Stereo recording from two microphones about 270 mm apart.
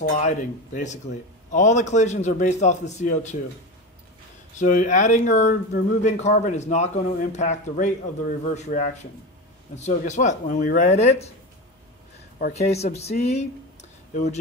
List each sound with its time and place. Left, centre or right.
0.2 s speech: left
4.6 s speech: left
12.4 s speech: left